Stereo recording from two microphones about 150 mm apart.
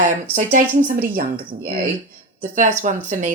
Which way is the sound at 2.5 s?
60° right (ahead or behind).